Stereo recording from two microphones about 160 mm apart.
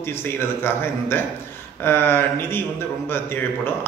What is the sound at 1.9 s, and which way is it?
Speech, 15° left (ahead or behind).